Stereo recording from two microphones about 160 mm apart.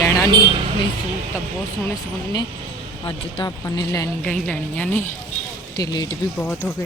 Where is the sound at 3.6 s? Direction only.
20° left (ahead or behind).